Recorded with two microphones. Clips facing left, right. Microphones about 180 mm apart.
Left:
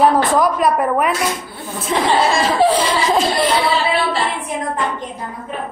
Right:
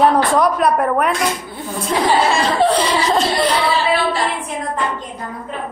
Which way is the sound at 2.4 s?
5° left (ahead or behind).